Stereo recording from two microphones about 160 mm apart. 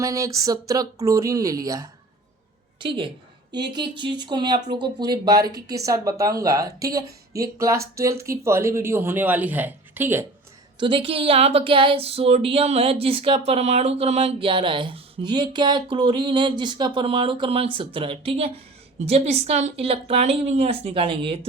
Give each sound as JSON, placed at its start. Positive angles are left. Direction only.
{"t": 0.0, "sound": "a woman's voice", "side_deg": -20}
{"t": 10.8, "sound": "speech", "side_deg": -30}